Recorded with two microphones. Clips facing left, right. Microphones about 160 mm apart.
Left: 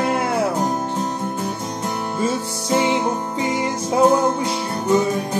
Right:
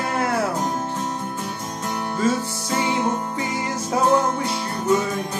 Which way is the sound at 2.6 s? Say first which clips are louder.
Left 4 dB; 20° left (ahead or behind).